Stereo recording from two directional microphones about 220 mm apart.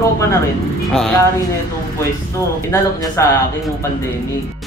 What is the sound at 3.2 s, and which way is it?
Speech, 15° left (ahead or behind).